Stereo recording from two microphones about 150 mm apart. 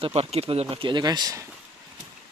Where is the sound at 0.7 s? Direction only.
35° right (ahead or behind).